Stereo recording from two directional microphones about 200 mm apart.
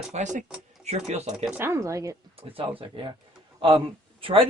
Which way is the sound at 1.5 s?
10° right (ahead or behind).